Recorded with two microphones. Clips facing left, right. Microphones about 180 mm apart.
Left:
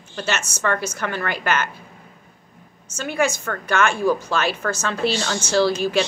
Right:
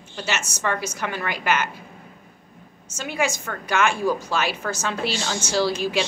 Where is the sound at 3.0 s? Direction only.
15° right (ahead or behind).